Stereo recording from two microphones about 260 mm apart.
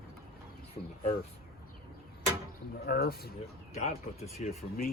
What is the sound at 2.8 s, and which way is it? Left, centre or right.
Speech, left.